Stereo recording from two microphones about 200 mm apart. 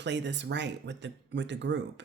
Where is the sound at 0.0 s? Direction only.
60° right (ahead or behind).